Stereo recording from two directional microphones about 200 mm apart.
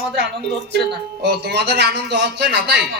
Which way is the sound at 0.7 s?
55° right (ahead or behind).